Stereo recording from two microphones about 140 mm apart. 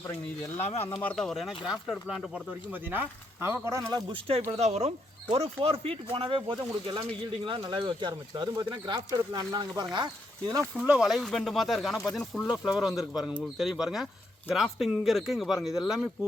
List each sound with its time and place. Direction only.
1.0 s speech: 5° left (ahead or behind); by 3.8 s 20° right (ahead or behind)
3.9 s speech: 40° right (ahead or behind)
10.8 s speech: 5° right (ahead or behind)